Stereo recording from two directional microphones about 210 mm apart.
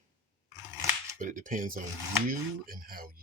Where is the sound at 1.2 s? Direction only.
40° right (ahead or behind).